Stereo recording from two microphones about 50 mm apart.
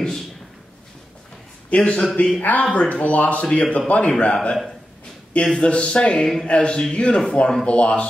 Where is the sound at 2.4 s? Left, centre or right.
Left.